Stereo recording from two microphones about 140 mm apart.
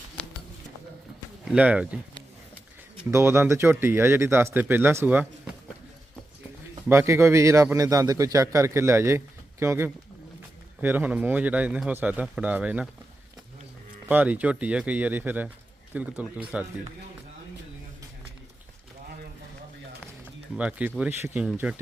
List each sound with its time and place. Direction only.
1.5 s speech: 10° right (ahead or behind)
3.1 s speech: 20° right (ahead or behind)
6.8 s a man's voice: 20° right (ahead or behind)
14.1 s speech: 10° right (ahead or behind)
20.2 s pigeon: 10° right (ahead or behind)
21.0 s speech: 15° right (ahead or behind)